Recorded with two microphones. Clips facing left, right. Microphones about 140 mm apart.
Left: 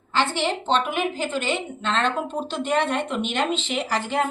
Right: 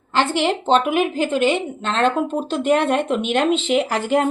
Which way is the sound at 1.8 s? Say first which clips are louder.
Right 4 dB; 50° right (ahead or behind).